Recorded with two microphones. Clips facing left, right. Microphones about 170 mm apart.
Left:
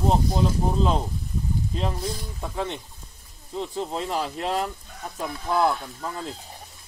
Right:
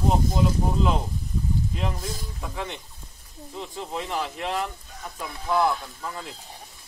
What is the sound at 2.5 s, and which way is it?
Speech, 35° left (ahead or behind).